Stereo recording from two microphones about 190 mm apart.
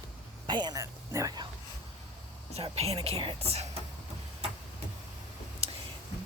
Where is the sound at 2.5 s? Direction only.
30° right (ahead or behind).